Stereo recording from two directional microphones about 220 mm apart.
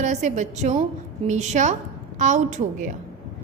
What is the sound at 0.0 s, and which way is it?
A woman's voice, 35° right (ahead or behind).